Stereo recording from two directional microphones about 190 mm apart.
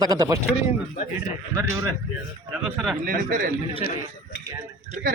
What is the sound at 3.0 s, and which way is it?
Speech, 45° right (ahead or behind).